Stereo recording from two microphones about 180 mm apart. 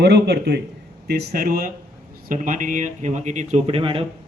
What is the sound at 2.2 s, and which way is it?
Speech, 45° right (ahead or behind).